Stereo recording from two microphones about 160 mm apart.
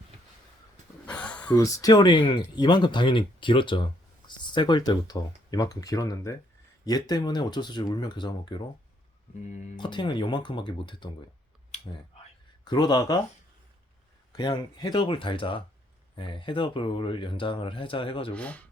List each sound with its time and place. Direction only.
1.0 s a sound: 10° left (ahead or behind)
1.5 s speech: 20° left (ahead or behind)
9.7 s speech: 30° left (ahead or behind)
11.7 s a sound: 45° left (ahead or behind)
12.6 s speech: 25° left (ahead or behind)
14.3 s speech: 25° left (ahead or behind)
18.3 s speech: 10° left (ahead or behind)